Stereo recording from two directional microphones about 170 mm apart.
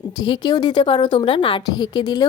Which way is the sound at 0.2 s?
25° left (ahead or behind).